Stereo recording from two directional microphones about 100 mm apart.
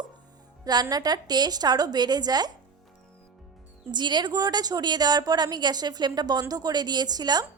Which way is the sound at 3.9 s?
50° right (ahead or behind).